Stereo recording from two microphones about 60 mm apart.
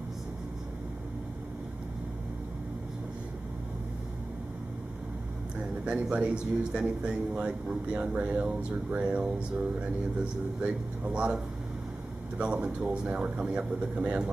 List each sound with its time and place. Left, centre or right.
5.9 s speech: centre
10.6 s speech: centre